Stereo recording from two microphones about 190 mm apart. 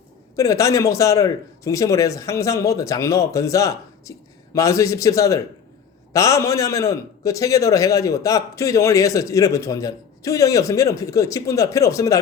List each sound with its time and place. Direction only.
0.3 s a man's voice: 15° left (ahead or behind)